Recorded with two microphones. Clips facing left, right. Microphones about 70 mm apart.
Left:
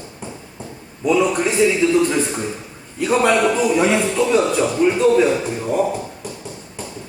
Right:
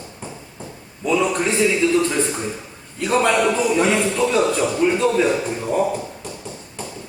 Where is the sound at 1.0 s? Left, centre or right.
Centre.